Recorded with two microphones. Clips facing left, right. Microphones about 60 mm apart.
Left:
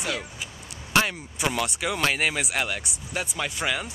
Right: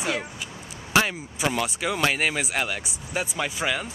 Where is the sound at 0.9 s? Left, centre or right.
Centre.